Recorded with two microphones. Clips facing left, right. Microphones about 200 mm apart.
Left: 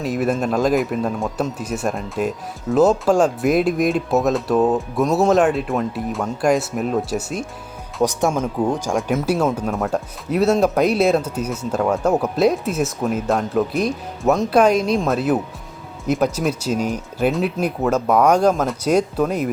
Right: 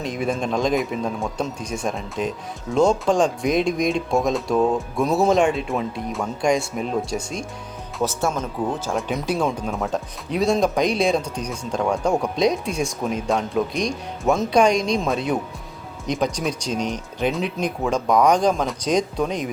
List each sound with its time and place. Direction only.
0.0 s speech: 5° left (ahead or behind)